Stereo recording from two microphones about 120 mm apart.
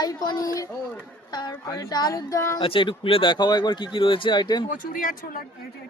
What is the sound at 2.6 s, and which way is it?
Speech, 45° left (ahead or behind).